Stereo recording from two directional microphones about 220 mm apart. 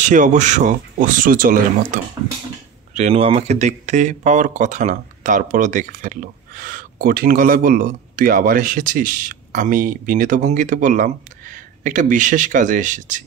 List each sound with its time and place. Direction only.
0.0 s speech: 35° right (ahead or behind)